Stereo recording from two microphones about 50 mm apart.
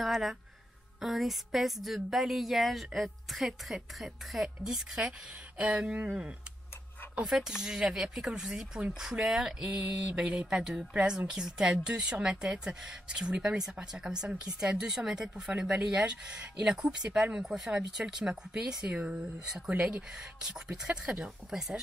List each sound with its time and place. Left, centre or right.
0.0 s a sound: centre
1.0 s a woman's voice: centre
7.2 s speech: centre
10.1 s speech: right
10.6 s speech: centre